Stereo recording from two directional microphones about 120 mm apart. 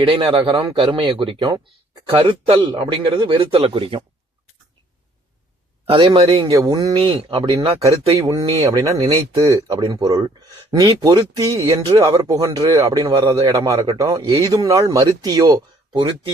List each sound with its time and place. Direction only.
0.0 s speech: 50° right (ahead or behind)
5.8 s speech: 50° right (ahead or behind)
6.5 s speech: 30° right (ahead or behind)
6.9 s speech: 45° right (ahead or behind)
8.5 s speech: 30° right (ahead or behind)